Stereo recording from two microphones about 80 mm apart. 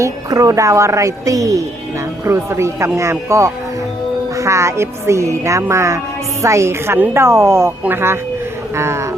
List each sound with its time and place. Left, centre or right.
0.0 s speech: right
2.2 s speech: right